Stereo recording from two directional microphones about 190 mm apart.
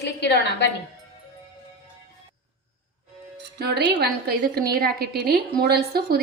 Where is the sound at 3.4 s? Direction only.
60° right (ahead or behind).